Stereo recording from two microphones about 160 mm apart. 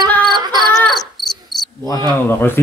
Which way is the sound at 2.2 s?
15° left (ahead or behind).